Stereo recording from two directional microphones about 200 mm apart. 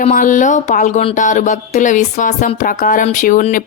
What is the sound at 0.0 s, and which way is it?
A woman's voice, 40° left (ahead or behind).